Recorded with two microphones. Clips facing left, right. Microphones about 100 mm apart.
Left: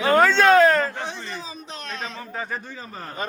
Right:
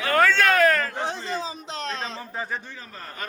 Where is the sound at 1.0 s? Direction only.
30° right (ahead or behind).